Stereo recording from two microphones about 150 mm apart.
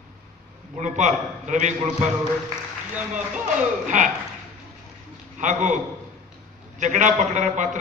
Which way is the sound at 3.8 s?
55° right (ahead or behind).